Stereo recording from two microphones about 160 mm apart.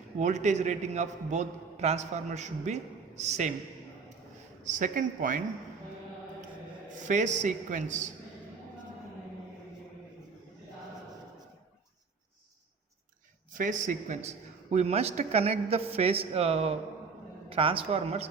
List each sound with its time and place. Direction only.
0.2 s a man's voice: 45° right (ahead or behind)
4.6 s speech: 50° right (ahead or behind)
7.0 s a man's voice: 50° right (ahead or behind)
13.5 s a man's voice: 55° right (ahead or behind); by 18.3 s 40° right (ahead or behind)